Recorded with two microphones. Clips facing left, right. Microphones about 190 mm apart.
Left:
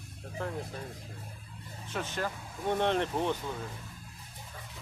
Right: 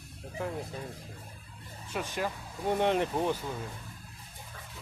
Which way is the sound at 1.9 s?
10° right (ahead or behind).